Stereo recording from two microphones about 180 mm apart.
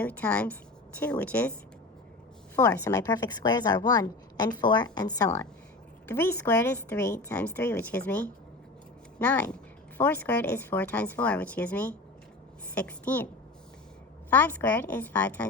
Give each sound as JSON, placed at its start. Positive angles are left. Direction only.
{"t": 0.0, "sound": "speech", "side_deg": 10}
{"t": 2.6, "sound": "a woman's voice", "side_deg": 10}
{"t": 14.3, "sound": "speech", "side_deg": 10}